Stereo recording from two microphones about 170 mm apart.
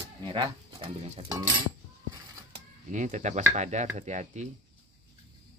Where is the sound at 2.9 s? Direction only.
45° right (ahead or behind).